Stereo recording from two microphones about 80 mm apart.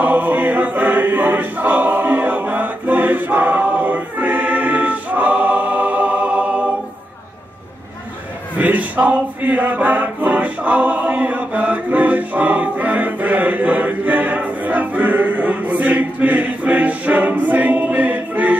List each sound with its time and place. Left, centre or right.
0.0 s choir: right
8.5 s music: centre